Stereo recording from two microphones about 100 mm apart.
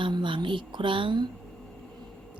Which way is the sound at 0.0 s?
55° right (ahead or behind).